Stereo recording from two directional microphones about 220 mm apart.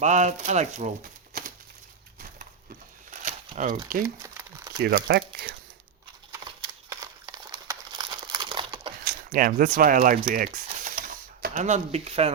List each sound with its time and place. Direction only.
0.0 s speech: 30° right (ahead or behind)
3.1 s a sound: 35° right (ahead or behind)
4.0 s crumpling: 15° right (ahead or behind)
4.8 s speech: 45° right (ahead or behind)
6.9 s crumpling: 15° right (ahead or behind)
9.0 s speech: 40° right (ahead or behind)